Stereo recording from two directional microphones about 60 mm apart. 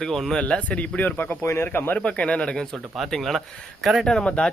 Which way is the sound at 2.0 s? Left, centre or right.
Centre.